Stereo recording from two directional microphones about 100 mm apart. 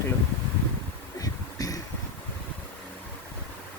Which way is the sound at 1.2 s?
35° left (ahead or behind).